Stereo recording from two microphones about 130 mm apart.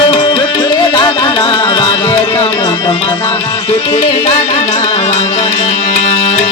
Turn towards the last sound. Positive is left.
turn(degrees=60)  # may be behind; listen again after turning